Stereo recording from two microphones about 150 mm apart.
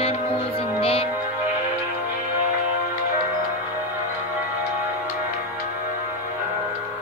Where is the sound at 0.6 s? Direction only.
40° left (ahead or behind).